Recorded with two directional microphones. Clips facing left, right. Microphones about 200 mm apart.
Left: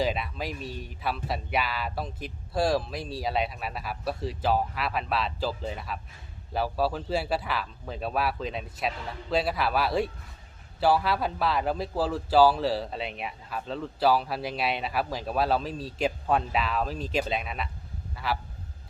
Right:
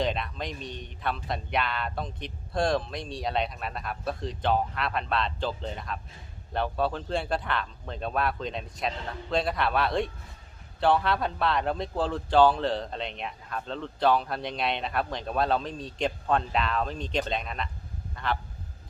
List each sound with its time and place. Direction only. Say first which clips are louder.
0.0 s a man's voice: left 1 dB; 5° left (ahead or behind)
18.1 s honk: even; 5° left (ahead or behind)